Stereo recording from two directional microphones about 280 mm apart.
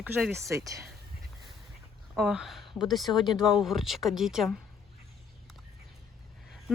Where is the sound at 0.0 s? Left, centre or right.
Centre.